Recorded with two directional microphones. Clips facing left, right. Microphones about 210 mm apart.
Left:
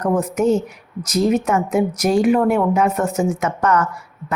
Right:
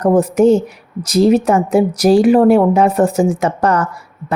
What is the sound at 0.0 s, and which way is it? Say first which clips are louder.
A woman's voice: right 7 dB; 35° right (ahead or behind).